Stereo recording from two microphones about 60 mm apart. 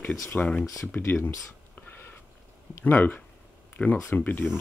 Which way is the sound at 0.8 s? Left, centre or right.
Left.